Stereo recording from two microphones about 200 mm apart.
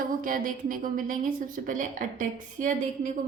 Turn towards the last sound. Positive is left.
turn(degrees=-40)  # may be behind; listen again after turning